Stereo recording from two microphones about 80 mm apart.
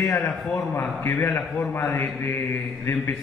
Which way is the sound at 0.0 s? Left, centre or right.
Left.